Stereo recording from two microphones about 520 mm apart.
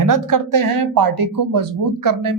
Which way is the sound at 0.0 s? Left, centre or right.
Right.